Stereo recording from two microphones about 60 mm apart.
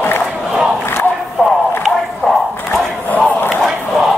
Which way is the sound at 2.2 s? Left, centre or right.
Left.